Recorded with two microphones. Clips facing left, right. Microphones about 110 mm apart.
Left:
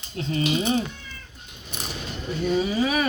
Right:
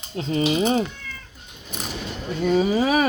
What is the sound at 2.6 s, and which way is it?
Speech, 40° right (ahead or behind).